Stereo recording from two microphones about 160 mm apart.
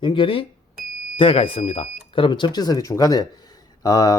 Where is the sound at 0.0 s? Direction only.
30° left (ahead or behind).